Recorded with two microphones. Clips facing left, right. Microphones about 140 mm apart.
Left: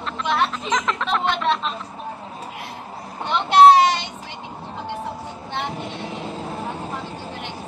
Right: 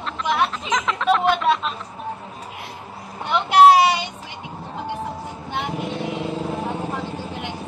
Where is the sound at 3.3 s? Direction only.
10° right (ahead or behind).